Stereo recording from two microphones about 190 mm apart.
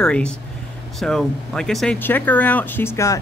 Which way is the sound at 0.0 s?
5° left (ahead or behind).